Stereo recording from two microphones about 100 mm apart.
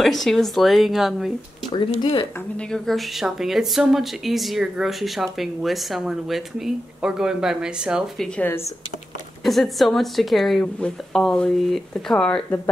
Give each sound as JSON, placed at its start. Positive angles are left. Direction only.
{"t": 0.0, "sound": "speech", "side_deg": 0}
{"t": 2.0, "sound": "speech", "side_deg": 50}
{"t": 2.5, "sound": "speech", "side_deg": 5}
{"t": 9.4, "sound": "speech", "side_deg": 0}